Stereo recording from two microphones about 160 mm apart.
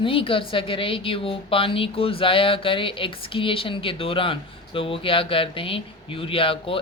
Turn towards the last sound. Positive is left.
turn(degrees=35)  # may be behind; listen again after turning